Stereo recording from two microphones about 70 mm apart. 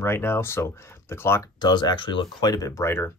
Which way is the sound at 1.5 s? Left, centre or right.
Left.